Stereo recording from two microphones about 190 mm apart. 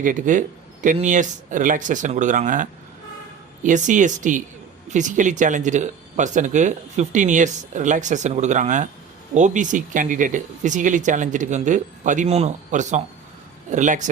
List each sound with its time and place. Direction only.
0.0 s speech: 45° right (ahead or behind)